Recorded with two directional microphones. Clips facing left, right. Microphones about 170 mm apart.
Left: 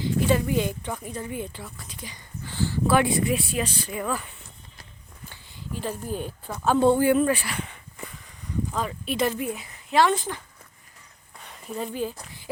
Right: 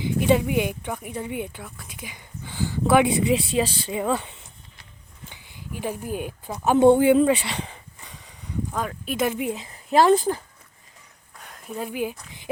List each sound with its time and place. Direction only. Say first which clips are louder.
0.2 s speech: right 3 dB; 20° right (ahead or behind)
5.3 s speech: left 2 dB; 15° right (ahead or behind)
8.7 s speech: even; 5° right (ahead or behind)
9.4 s speech: right 3 dB; 25° right (ahead or behind)
11.3 s a sound: even; centre (ahead or behind)